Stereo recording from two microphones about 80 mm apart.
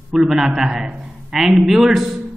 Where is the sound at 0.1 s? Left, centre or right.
Centre.